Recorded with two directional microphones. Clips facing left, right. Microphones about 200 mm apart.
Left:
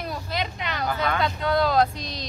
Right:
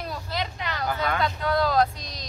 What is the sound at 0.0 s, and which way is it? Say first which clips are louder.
Speech: left 2 dB; 15° left (ahead or behind).